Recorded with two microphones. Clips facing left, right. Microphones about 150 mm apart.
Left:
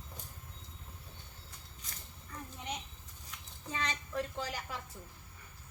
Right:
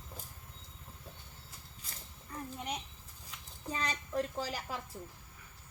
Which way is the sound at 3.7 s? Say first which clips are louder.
Right 2 dB; 35° right (ahead or behind).